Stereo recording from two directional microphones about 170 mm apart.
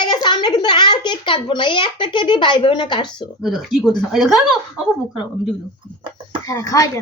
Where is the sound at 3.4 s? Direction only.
Centre (ahead or behind).